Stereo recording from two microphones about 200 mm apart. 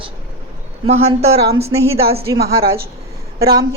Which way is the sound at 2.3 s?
50° right (ahead or behind).